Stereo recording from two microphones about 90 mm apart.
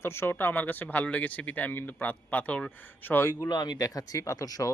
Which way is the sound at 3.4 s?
55° left (ahead or behind).